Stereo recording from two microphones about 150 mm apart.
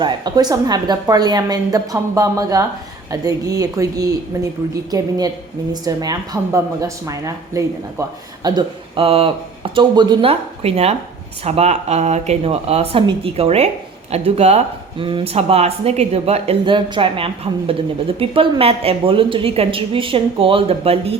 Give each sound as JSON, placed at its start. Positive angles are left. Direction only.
{"t": 0.0, "sound": "a woman's voice", "side_deg": -30}
{"t": 8.4, "sound": "speech", "side_deg": -35}